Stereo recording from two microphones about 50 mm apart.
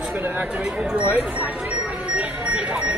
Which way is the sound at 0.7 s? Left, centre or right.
Right.